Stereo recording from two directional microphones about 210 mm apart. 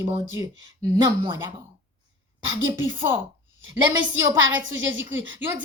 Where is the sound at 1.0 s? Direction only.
25° right (ahead or behind).